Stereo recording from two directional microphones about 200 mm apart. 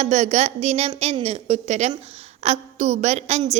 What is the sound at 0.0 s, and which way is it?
A woman's voice, 35° right (ahead or behind).